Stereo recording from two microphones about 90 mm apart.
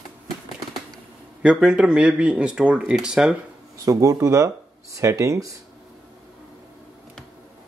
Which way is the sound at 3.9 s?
35° right (ahead or behind).